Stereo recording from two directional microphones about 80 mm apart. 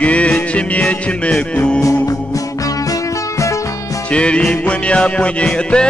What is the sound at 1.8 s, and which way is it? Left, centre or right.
Music, left.